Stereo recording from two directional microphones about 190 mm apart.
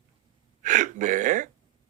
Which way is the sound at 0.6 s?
40° right (ahead or behind).